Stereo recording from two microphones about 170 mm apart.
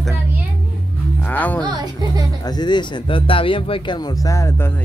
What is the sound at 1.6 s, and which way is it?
Speech, 25° right (ahead or behind).